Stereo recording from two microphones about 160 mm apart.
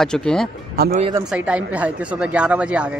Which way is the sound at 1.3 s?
10° right (ahead or behind).